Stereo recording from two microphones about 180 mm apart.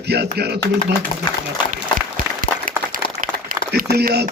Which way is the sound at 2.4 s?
50° right (ahead or behind).